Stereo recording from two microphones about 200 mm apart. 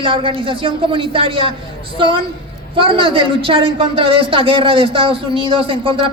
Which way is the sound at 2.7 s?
25° right (ahead or behind).